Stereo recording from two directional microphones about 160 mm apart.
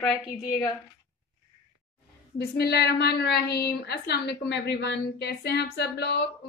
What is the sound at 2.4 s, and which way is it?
A woman's voice, 90° left.